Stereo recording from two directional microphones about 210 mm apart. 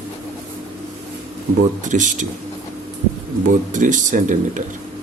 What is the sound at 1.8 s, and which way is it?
Speech, 35° right (ahead or behind).